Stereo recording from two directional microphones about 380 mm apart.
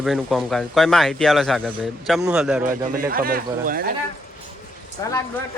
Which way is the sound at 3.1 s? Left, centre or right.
Right.